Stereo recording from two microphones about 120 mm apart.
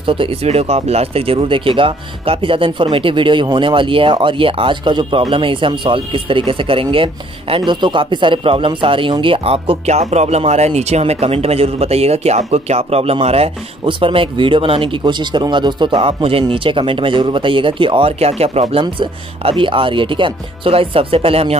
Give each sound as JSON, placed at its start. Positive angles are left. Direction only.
{"t": 0.0, "sound": "speech", "side_deg": -45}